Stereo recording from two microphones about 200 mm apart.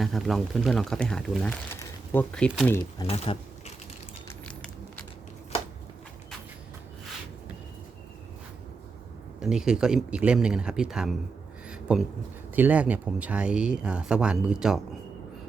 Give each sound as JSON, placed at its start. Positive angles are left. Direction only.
{"t": 0.0, "sound": "speech", "side_deg": 0}
{"t": 3.3, "sound": "speech", "side_deg": 25}
{"t": 4.4, "sound": "a sound", "side_deg": 5}
{"t": 9.4, "sound": "speech", "side_deg": -5}
{"t": 11.7, "sound": "a sound", "side_deg": -5}
{"t": 12.5, "sound": "speech", "side_deg": -10}